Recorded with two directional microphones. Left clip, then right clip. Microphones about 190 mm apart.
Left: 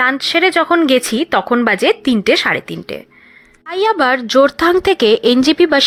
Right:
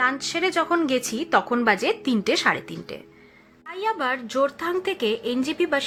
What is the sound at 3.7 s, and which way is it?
A woman's voice, 50° left (ahead or behind).